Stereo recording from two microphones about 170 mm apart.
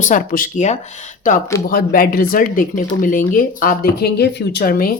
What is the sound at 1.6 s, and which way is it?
Speech, 60° left (ahead or behind).